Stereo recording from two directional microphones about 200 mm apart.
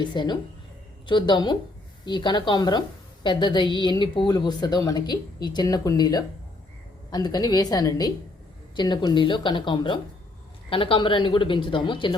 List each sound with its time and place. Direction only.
0.0 s a woman's voice: 20° left (ahead or behind)